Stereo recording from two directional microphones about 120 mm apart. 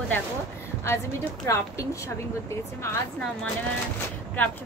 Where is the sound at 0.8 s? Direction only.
20° left (ahead or behind).